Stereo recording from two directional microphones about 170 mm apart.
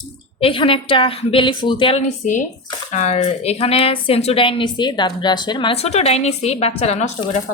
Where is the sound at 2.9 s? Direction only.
40° left (ahead or behind).